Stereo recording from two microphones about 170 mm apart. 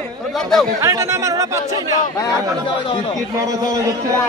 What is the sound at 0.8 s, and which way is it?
Speech, 15° right (ahead or behind).